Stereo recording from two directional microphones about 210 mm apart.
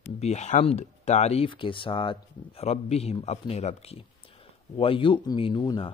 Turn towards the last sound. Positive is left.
turn(degrees=25)  # may be behind; listen again after turning